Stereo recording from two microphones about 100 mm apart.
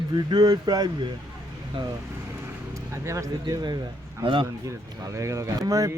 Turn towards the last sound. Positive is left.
turn(degrees=-35)  # may be behind; listen again after turning